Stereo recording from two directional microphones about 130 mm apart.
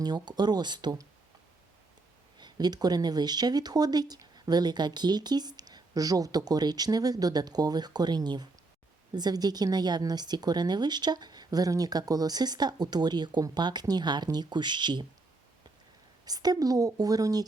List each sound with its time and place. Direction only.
0.0 s speech: 35° right (ahead or behind)
2.4 s speech: 30° right (ahead or behind)
16.2 s a woman's voice: 30° right (ahead or behind)